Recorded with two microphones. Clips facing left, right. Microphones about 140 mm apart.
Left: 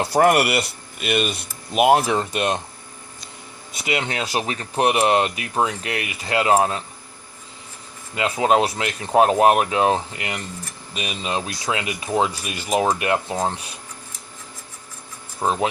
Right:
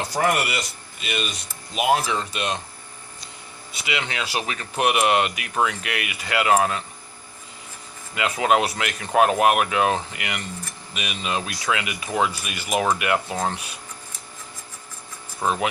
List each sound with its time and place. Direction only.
0.0 s speech: 60° left (ahead or behind)
4.1 s speech: 40° left (ahead or behind)
8.1 s speech: 30° left (ahead or behind)
15.4 s speech: 25° left (ahead or behind)